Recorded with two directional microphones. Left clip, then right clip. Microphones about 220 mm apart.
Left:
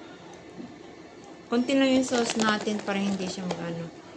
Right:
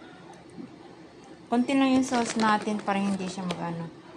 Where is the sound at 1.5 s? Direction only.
15° right (ahead or behind).